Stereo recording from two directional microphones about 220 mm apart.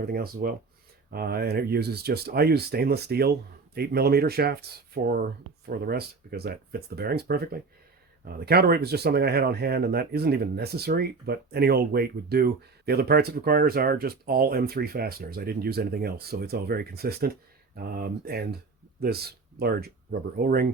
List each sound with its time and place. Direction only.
0.0 s speech: 45° right (ahead or behind)